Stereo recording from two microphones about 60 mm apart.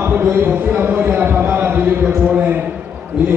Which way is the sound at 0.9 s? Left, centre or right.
Right.